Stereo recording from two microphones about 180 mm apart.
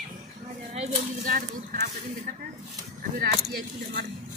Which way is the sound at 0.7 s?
40° right (ahead or behind).